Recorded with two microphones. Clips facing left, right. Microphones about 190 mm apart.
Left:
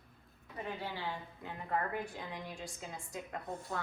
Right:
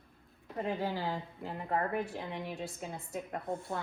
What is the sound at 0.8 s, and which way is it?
Speech, 40° right (ahead or behind).